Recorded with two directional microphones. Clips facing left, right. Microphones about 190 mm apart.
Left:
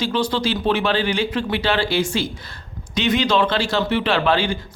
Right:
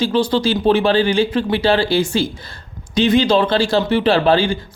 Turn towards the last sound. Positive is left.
turn(degrees=-35)  # may be behind; listen again after turning